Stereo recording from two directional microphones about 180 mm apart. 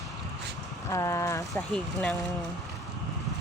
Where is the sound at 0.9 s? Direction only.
15° left (ahead or behind).